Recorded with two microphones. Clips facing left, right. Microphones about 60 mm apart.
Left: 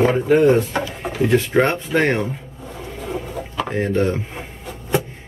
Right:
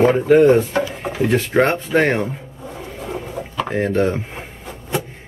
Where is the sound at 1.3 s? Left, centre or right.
Centre.